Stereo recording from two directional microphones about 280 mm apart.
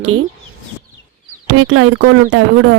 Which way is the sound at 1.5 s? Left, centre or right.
Right.